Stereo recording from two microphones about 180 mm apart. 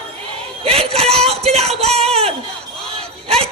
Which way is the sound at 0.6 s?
35° right (ahead or behind).